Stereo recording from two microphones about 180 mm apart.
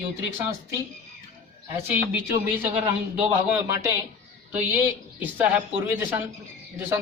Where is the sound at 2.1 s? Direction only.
10° right (ahead or behind).